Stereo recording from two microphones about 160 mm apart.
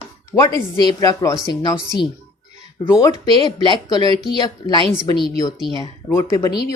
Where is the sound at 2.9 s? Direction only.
20° left (ahead or behind).